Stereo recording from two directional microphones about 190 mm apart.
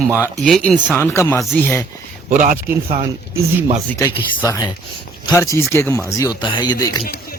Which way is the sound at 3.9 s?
10° left (ahead or behind).